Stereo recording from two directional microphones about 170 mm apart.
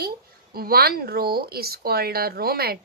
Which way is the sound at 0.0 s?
65° right (ahead or behind).